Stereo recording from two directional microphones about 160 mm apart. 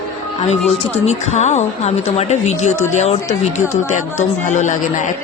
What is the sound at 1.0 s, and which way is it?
A woman's voice, 45° left (ahead or behind).